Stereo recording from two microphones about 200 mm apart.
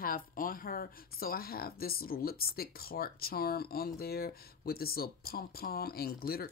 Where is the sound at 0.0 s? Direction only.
45° left (ahead or behind).